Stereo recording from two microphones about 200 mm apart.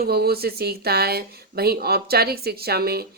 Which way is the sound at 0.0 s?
50° right (ahead or behind).